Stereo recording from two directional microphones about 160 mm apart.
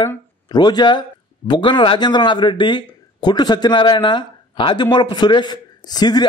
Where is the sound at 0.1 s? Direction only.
25° left (ahead or behind).